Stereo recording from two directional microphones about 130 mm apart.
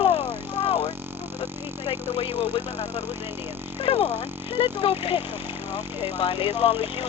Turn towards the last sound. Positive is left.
turn(degrees=40)  # may be behind; listen again after turning